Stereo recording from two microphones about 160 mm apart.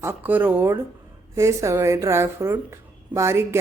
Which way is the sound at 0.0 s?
15° right (ahead or behind).